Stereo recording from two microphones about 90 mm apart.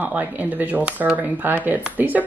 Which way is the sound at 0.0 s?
20° right (ahead or behind).